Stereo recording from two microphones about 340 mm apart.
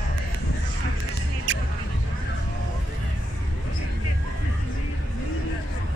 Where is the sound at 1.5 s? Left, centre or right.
Right.